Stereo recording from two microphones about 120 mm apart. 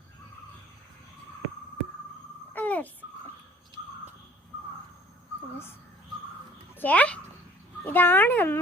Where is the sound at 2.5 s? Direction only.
15° left (ahead or behind).